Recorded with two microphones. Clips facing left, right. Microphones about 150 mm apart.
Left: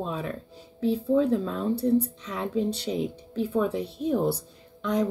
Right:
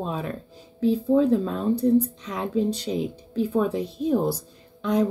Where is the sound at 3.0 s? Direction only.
35° right (ahead or behind).